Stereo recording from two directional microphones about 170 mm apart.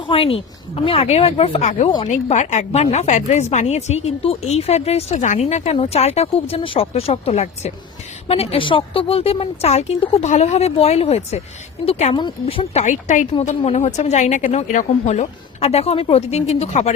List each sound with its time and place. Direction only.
0.1 s speech: 35° left (ahead or behind)
12.1 s speech: 30° left (ahead or behind)